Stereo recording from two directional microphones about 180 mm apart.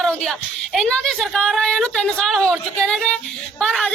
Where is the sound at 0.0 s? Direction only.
5° left (ahead or behind).